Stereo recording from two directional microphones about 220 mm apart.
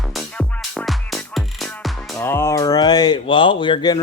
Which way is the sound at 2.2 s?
10° left (ahead or behind).